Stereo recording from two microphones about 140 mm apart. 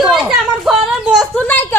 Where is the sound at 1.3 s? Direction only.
10° left (ahead or behind).